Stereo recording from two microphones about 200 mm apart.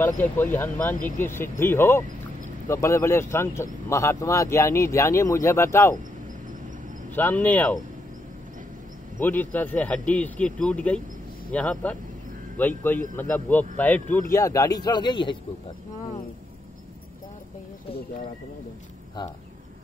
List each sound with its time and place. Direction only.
0.0 s speech: 10° left (ahead or behind)
0.9 s speech: 40° left (ahead or behind)
1.2 s speech: 10° left (ahead or behind)
7.2 s speech: 10° left (ahead or behind)
9.2 s speech: 10° left (ahead or behind)